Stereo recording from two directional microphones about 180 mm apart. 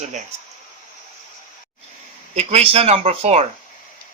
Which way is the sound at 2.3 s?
35° right (ahead or behind).